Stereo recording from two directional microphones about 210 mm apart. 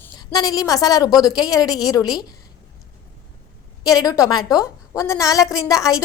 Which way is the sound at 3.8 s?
15° left (ahead or behind).